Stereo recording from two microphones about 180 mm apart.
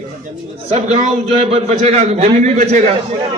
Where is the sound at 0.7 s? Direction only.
40° right (ahead or behind).